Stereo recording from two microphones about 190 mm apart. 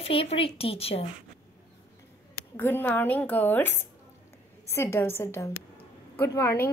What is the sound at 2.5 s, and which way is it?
A woman's voice, 10° left (ahead or behind).